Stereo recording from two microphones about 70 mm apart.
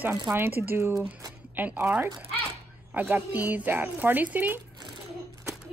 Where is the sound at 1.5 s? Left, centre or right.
Right.